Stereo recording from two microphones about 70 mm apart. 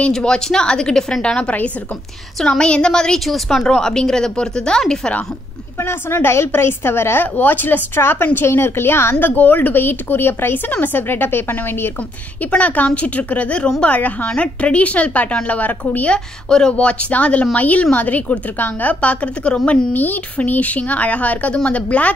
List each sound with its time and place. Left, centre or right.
0.1 s a woman's voice: centre
5.8 s a woman's voice: left
7.3 s a woman's voice: left
9.2 s a woman's voice: left
12.4 s a woman's voice: centre
19.9 s a woman's voice: left